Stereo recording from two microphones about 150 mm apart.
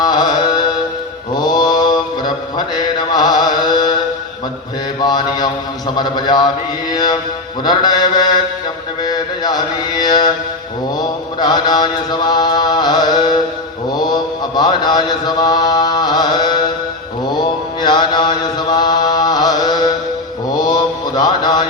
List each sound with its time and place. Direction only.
0.0 s music: 30° left (ahead or behind)
1.4 s mantra: 30° left (ahead or behind)
17.8 s chant: 30° left (ahead or behind)
21.2 s music: 25° left (ahead or behind)